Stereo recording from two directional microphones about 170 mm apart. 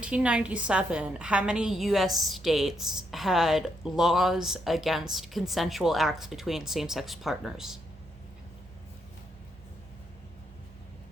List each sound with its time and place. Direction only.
0.0 s a woman's voice: 5° right (ahead or behind)